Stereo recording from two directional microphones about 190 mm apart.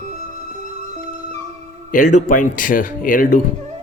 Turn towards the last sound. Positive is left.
turn(degrees=45)  # may be behind; listen again after turning